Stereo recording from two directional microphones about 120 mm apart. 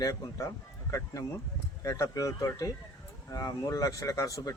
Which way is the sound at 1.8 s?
25° left (ahead or behind).